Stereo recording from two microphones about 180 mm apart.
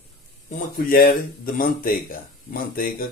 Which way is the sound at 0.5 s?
55° left (ahead or behind).